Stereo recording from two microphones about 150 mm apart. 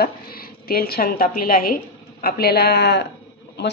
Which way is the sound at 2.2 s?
90° left.